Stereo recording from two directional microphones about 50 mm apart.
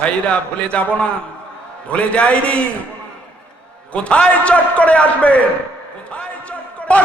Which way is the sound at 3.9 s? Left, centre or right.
Left.